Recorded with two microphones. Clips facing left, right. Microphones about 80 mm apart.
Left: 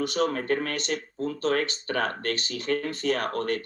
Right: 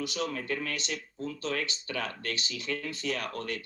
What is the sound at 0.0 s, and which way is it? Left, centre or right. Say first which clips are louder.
Speech: left 7 dB; left.